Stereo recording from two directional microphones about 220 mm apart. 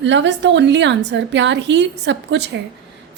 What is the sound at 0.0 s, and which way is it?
A woman's voice, 55° right (ahead or behind).